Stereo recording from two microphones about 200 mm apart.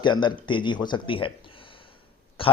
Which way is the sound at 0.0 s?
20° left (ahead or behind).